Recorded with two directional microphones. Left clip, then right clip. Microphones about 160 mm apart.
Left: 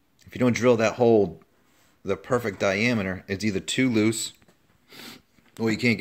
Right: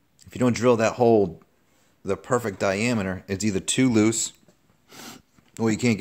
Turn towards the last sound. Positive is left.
turn(degrees=-25)  # may be behind; listen again after turning